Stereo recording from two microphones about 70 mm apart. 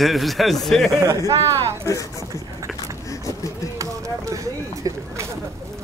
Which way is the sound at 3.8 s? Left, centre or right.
Right.